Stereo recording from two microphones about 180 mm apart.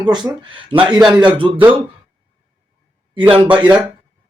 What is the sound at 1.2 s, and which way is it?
Speech, 25° right (ahead or behind).